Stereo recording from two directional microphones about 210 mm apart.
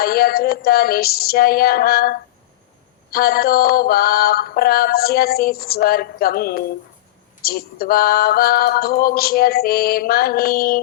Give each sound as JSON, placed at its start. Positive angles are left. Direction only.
{"t": 0.0, "sound": "mantra", "side_deg": 45}